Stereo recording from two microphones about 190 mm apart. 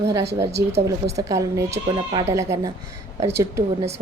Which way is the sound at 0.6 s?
15° right (ahead or behind).